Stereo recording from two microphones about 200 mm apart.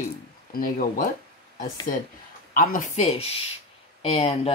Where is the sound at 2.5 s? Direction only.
40° left (ahead or behind).